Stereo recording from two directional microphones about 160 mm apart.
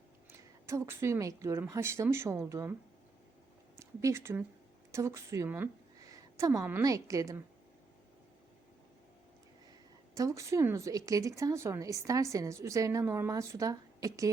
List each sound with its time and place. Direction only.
0.3 s a woman's voice: 15° right (ahead or behind)
3.8 s a woman's voice: 20° right (ahead or behind)
10.2 s a woman's voice: 20° right (ahead or behind)